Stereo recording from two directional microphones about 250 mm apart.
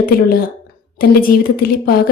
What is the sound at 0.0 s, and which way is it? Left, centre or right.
Speech, left.